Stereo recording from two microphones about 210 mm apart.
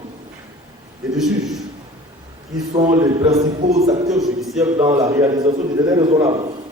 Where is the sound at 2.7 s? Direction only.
30° right (ahead or behind).